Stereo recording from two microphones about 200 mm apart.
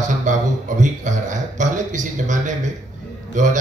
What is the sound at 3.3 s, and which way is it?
Speech, 40° right (ahead or behind).